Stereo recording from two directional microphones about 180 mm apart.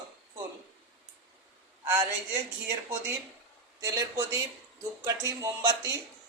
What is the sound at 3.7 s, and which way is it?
Speech, 15° right (ahead or behind).